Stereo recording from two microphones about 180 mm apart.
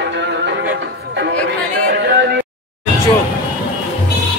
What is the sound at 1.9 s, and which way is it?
Speech, 80° right.